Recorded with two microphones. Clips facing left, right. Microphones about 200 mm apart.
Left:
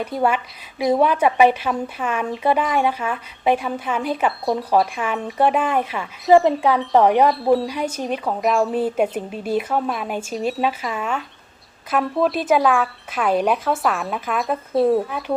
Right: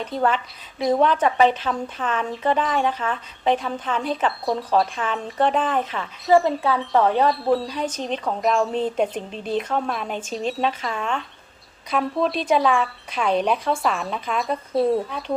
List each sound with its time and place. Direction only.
0.0 s speech: 10° left (ahead or behind)
7.3 s speech: centre (ahead or behind)